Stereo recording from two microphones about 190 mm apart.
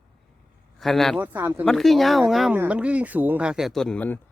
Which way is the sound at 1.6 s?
Centre (ahead or behind).